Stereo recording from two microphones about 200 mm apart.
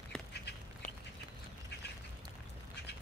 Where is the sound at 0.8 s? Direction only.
40° left (ahead or behind).